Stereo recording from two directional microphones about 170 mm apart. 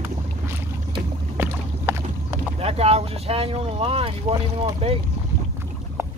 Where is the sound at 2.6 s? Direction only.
35° right (ahead or behind).